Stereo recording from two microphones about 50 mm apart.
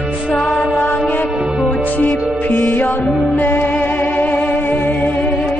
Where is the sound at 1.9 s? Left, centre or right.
Left.